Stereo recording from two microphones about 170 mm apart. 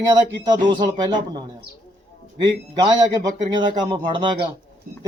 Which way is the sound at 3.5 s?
25° right (ahead or behind).